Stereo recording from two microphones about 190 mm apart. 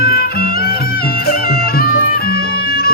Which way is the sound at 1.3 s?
50° left (ahead or behind).